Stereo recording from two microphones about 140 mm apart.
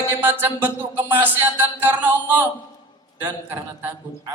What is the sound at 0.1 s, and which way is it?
A man's voice, 15° right (ahead or behind).